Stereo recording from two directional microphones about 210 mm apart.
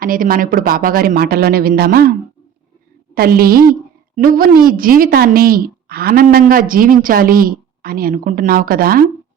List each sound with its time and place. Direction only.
0.0 s a woman's voice: 40° right (ahead or behind)
3.2 s a woman's voice: 45° right (ahead or behind)